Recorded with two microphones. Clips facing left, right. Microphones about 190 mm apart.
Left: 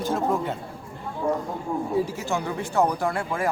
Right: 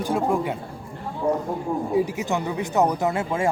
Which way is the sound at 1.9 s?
15° right (ahead or behind).